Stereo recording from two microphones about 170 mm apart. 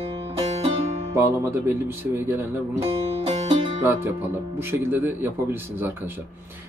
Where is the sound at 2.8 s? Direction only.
35° right (ahead or behind).